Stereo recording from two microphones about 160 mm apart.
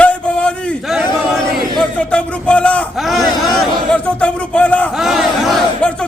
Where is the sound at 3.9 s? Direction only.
10° left (ahead or behind).